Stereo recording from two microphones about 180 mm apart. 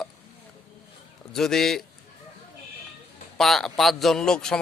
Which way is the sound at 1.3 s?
Centre (ahead or behind).